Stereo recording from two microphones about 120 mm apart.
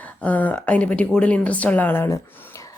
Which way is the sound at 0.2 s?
15° left (ahead or behind).